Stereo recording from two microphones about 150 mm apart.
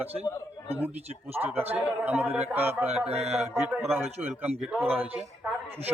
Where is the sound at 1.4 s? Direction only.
15° right (ahead or behind).